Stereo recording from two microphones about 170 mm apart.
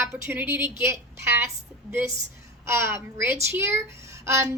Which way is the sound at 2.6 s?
15° right (ahead or behind).